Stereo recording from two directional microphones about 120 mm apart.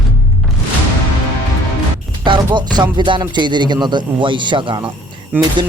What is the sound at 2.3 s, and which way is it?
Speech, 40° right (ahead or behind).